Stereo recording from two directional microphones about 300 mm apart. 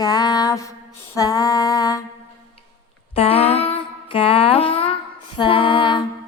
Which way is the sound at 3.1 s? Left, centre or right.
Centre.